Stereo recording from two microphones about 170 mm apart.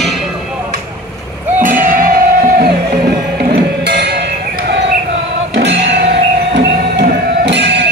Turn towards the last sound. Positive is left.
turn(degrees=-90)